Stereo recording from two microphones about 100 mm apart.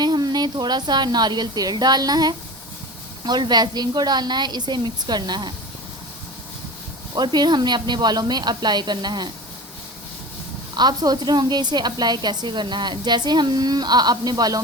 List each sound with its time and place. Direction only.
0.0 s a woman's voice: 45° right (ahead or behind)
7.2 s a woman's voice: 45° right (ahead or behind)
10.8 s a woman's voice: 45° right (ahead or behind)